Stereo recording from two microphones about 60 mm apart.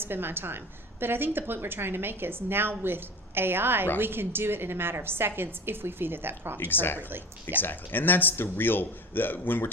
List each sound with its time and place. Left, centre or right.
0.0 s a woman's voice: right
6.6 s a man's voice: left